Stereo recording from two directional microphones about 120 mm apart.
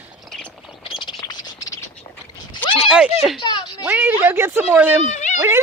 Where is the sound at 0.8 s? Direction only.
45° left (ahead or behind).